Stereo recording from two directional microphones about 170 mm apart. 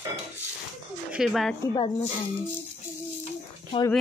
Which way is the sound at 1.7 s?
35° left (ahead or behind).